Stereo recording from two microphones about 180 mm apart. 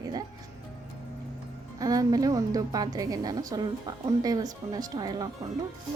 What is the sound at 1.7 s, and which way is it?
Speech, 20° right (ahead or behind).